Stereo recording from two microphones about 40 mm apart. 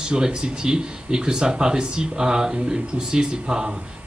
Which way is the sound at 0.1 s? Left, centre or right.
Centre.